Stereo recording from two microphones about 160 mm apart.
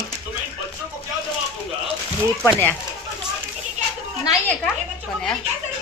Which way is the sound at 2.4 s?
5° left (ahead or behind).